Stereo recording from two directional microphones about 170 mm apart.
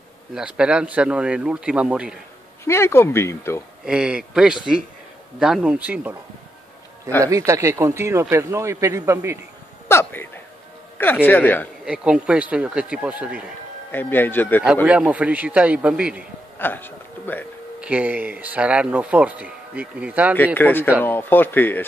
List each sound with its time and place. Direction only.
0.6 s speech: 5° right (ahead or behind)
2.6 s speech: 15° left (ahead or behind)
3.8 s a man's voice: 5° right (ahead or behind)
7.2 s speech: 20° right (ahead or behind)
9.8 s a sound: 15° left (ahead or behind)
11.0 s speech: 10° left (ahead or behind)
11.8 s speech: 5° right (ahead or behind)
13.9 s speech: 10° left (ahead or behind)
14.9 s speech: 5° right (ahead or behind)
16.5 s a sound: 10° left (ahead or behind)
17.7 s speech: 10° right (ahead or behind)
20.5 s speech: 10° left (ahead or behind)